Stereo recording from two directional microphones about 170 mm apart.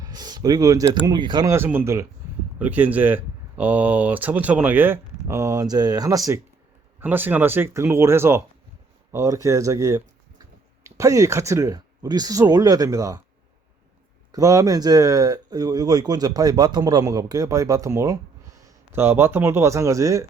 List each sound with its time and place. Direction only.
0.0 s a sound: 25° right (ahead or behind)
1.0 s speech: 25° right (ahead or behind)
14.3 s speech: 20° right (ahead or behind)